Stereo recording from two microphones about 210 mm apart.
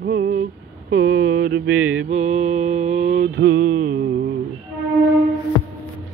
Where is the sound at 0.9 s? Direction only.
45° right (ahead or behind).